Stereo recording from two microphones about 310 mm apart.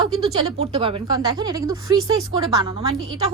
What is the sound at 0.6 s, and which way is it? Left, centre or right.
Speech, centre.